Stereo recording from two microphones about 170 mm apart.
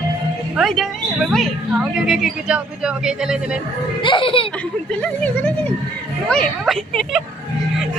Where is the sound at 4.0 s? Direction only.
30° left (ahead or behind).